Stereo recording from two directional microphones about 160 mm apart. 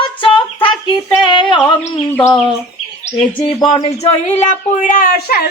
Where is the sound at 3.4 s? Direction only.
30° left (ahead or behind).